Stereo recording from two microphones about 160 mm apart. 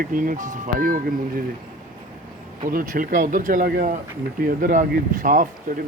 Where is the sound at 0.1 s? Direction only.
55° right (ahead or behind).